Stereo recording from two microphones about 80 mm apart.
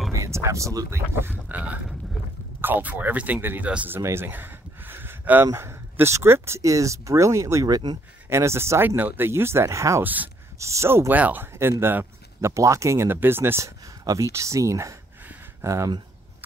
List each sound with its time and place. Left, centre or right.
0.1 s speech: right
1.5 s speech: centre
4.0 s a sound: right
5.5 s speech: right
7.6 s speech: right
8.3 s speech: right
10.0 s speech: right
10.6 s speech: right
11.1 s speech: right
14.0 s speech: right